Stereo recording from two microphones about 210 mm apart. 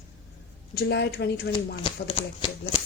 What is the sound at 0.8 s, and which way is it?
Speech, 55° left (ahead or behind).